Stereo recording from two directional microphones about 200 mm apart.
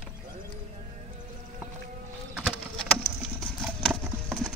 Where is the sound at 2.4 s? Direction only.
Centre (ahead or behind).